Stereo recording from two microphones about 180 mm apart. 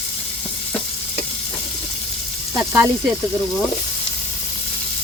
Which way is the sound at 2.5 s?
15° right (ahead or behind).